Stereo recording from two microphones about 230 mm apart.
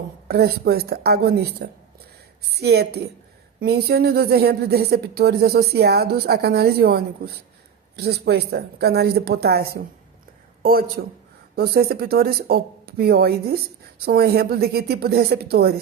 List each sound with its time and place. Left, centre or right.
0.3 s a woman's voice: right